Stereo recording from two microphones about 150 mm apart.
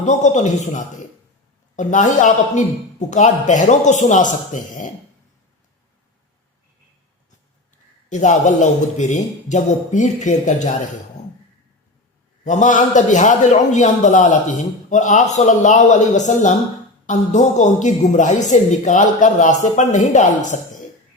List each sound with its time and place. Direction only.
0.0 s a man's voice: 50° left (ahead or behind)
8.1 s a man's voice: 55° left (ahead or behind)
12.5 s a man's voice: 55° left (ahead or behind)